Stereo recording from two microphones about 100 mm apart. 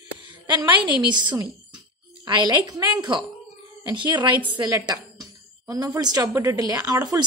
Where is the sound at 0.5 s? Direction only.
50° right (ahead or behind).